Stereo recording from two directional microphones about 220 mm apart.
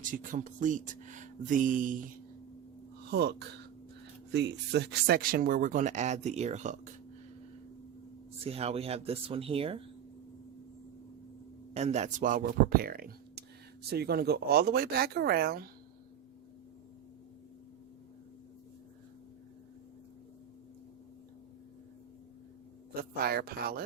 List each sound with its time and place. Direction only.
0.0 s speech: 35° right (ahead or behind)
3.1 s speech: 50° right (ahead or behind); by 6.9 s 30° right (ahead or behind)
8.4 s speech: 25° right (ahead or behind)
11.7 s speech: 30° right (ahead or behind)
23.2 s speech: 45° right (ahead or behind)